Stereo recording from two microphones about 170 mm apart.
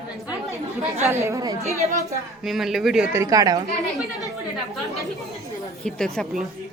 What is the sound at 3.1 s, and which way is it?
Speech, 20° right (ahead or behind).